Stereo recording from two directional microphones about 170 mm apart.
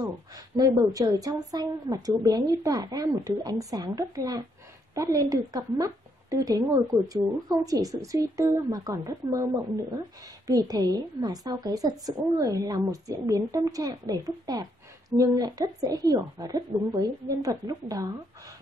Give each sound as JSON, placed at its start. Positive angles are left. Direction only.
{"t": 0.6, "sound": "a woman's voice", "side_deg": -20}